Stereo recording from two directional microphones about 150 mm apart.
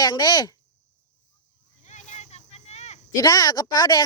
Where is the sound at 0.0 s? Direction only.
25° left (ahead or behind).